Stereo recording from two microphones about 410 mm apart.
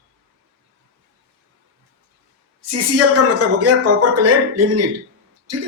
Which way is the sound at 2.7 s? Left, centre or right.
Right.